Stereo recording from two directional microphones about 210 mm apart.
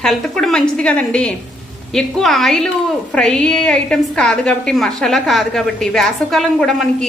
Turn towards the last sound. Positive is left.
turn(degrees=0)  # may be behind; listen again after turning